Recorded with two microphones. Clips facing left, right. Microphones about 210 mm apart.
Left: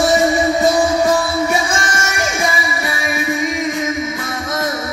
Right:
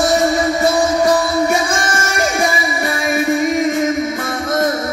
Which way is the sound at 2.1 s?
45° right (ahead or behind).